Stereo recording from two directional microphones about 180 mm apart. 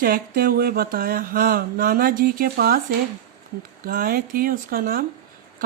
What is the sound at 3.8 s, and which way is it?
Speech, 55° right (ahead or behind).